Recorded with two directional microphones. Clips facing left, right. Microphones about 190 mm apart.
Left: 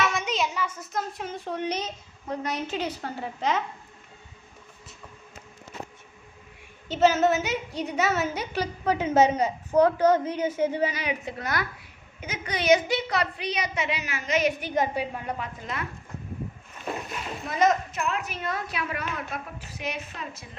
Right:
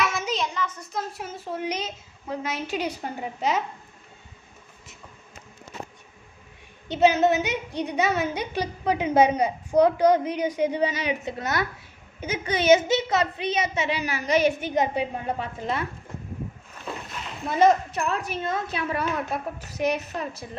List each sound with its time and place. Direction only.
0.0 s a child's voice: centre (ahead or behind)
6.8 s a child's voice: 15° right (ahead or behind)
17.5 s a woman's voice: 30° right (ahead or behind)
19.5 s a woman's voice: 40° right (ahead or behind)